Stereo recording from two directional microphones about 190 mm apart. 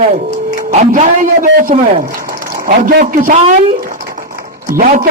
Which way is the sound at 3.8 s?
45° right (ahead or behind).